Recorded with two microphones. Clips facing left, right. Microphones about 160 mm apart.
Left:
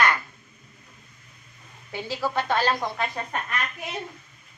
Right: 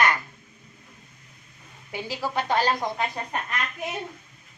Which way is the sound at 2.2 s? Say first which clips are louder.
Even; 15° right (ahead or behind).